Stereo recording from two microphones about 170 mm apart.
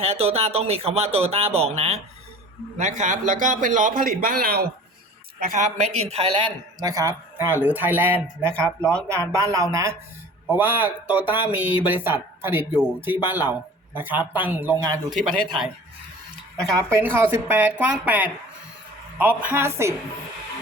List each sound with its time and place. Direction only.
0.0 s a man's voice: 35° right (ahead or behind); by 4.6 s 60° right (ahead or behind)
5.4 s a man's voice: 45° right (ahead or behind); by 8.7 s 15° right (ahead or behind)
8.8 s speech: 5° left (ahead or behind)
9.3 s speech: 20° right (ahead or behind)
16.7 s speech: 15° right (ahead or behind)